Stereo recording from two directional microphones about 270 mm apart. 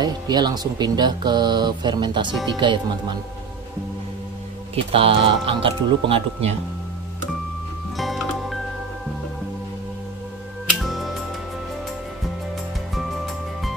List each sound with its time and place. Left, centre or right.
0.0 s speech: centre
4.7 s speech: centre
8.0 s music: centre
10.8 s music: centre